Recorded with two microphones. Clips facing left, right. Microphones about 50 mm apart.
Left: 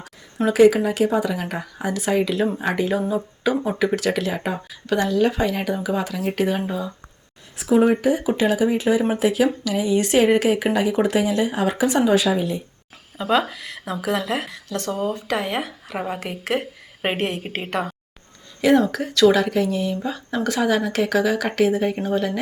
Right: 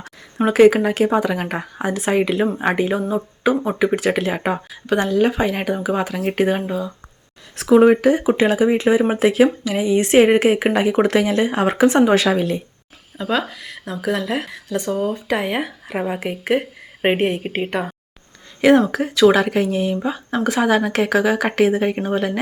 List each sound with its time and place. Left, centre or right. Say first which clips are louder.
0.3 s speech: right 2 dB; right
2.9 s speech: right 1 dB; centre
4.1 s speech: right 4 dB; right
6.7 s a woman's voice: right 3 dB; centre
7.5 s speech: right 5 dB; right
8.1 s speech: right 3 dB; right
12.1 s a woman's voice: right 3 dB; right
13.1 s speech: left 1 dB; centre
14.7 s a woman's voice: right 3 dB; centre
18.9 s speech: right 2 dB; right
20.6 s speech: right 3 dB; right